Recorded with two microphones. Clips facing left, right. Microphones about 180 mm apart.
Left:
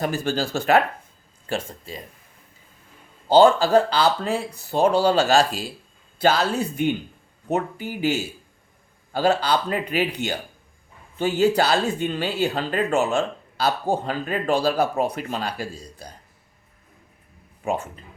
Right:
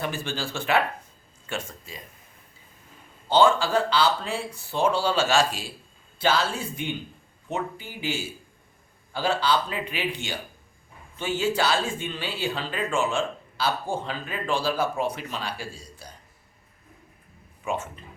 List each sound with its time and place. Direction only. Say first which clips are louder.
0.0 s speech: left 6 dB; 40° left (ahead or behind)
3.2 s speech: left 5 dB; 35° left (ahead or behind)
17.6 s speech: left 4 dB; 40° left (ahead or behind)